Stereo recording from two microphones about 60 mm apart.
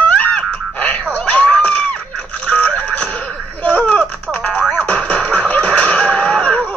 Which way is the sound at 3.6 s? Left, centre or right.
Left.